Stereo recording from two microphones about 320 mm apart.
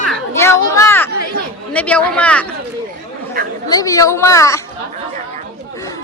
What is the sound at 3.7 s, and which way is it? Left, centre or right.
Speech, centre.